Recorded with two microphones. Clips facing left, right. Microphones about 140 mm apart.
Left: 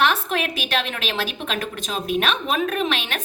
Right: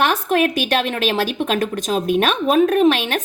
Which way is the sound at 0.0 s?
45° right (ahead or behind).